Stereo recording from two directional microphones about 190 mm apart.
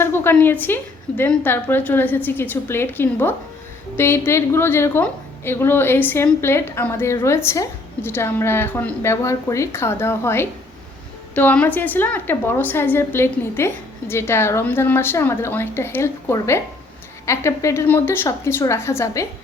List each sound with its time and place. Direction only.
0.0 s a woman's voice: 10° left (ahead or behind)